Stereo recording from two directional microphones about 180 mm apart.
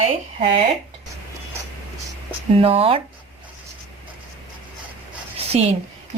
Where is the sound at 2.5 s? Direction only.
30° right (ahead or behind).